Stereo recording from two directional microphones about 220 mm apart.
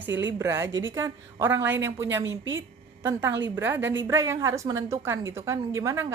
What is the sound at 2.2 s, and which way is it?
Speech, 60° right (ahead or behind).